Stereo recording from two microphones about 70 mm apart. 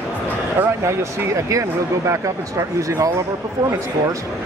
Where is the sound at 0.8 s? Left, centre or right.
Right.